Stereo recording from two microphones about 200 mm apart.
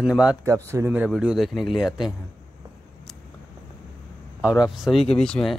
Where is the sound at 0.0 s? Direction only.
5° right (ahead or behind).